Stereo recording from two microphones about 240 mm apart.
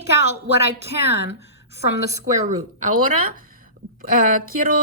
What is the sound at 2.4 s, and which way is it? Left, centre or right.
Speech, right.